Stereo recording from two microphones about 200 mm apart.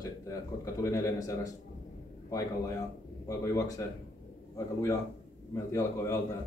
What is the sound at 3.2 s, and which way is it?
Speech, 15° left (ahead or behind).